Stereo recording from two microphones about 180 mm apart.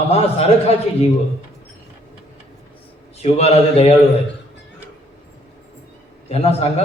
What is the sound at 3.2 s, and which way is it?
Speech, 35° left (ahead or behind).